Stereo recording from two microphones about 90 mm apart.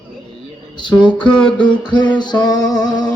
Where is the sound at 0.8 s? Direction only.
60° left (ahead or behind).